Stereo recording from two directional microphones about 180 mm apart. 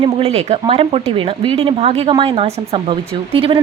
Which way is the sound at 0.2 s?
35° right (ahead or behind).